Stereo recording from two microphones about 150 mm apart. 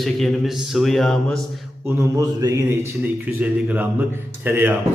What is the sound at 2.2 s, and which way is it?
Speech, 25° right (ahead or behind).